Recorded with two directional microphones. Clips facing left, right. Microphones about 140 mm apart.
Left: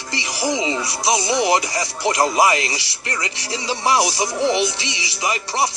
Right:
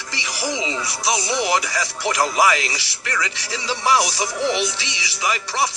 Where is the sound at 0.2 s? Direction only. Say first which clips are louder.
Left 3 dB; 25° left (ahead or behind).